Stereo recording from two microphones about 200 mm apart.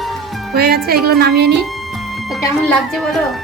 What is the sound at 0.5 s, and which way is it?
Speech, 50° right (ahead or behind).